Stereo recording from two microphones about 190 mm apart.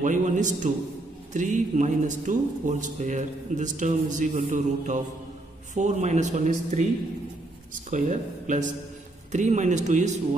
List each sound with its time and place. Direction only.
0.0 s speech: 40° right (ahead or behind)
7.9 s speech: 40° right (ahead or behind)